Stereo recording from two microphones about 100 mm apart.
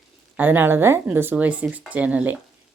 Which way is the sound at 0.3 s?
20° right (ahead or behind).